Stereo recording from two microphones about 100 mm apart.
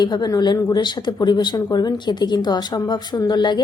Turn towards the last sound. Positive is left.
turn(degrees=45)  # may be behind; listen again after turning